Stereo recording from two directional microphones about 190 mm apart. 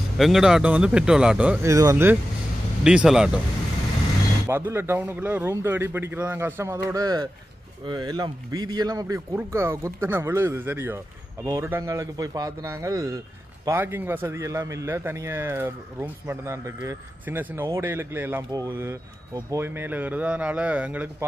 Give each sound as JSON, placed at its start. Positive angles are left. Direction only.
{"t": 0.2, "sound": "speech", "side_deg": 0}
{"t": 2.8, "sound": "speech", "side_deg": -5}
{"t": 4.5, "sound": "a man's voice", "side_deg": -10}